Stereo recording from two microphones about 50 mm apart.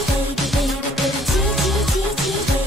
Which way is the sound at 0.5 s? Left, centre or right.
Centre.